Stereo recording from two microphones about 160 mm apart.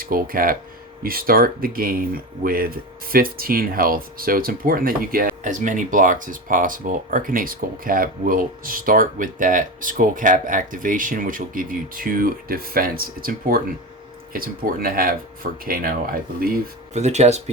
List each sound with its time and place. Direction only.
0.0 s speech: 65° right (ahead or behind)
16.9 s speech: 45° right (ahead or behind)